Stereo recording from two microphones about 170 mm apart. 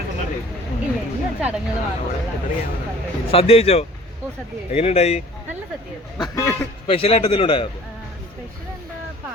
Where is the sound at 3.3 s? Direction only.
35° left (ahead or behind).